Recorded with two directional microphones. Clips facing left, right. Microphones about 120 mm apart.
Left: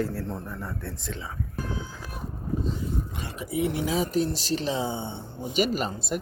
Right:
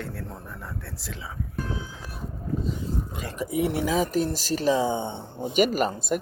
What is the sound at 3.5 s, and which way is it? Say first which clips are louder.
Speech: right 2 dB; 50° right (ahead or behind).